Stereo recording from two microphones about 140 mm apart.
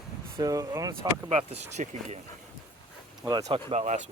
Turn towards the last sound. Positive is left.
turn(degrees=-50)  # may be behind; listen again after turning